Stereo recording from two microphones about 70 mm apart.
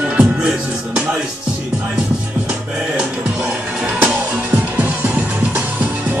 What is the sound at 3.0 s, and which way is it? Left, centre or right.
Music, centre.